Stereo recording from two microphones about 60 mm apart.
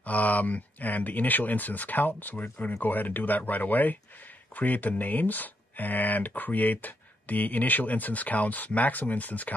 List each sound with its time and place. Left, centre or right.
0.0 s speech: left